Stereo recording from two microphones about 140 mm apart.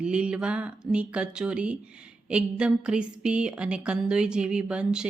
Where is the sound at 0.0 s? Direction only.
5° right (ahead or behind).